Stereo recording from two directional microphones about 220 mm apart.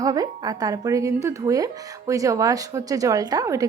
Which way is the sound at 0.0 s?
15° right (ahead or behind).